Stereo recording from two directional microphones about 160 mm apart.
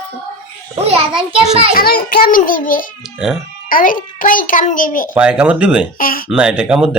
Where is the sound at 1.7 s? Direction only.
70° left (ahead or behind).